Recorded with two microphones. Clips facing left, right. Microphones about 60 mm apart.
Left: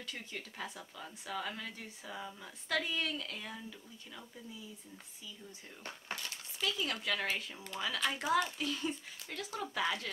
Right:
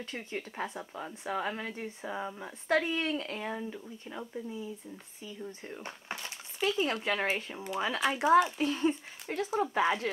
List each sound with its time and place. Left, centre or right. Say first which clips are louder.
0.0 s a woman's voice: right 6 dB; right
5.9 s speech: left 1 dB; right
6.6 s a woman's voice: right 7 dB; right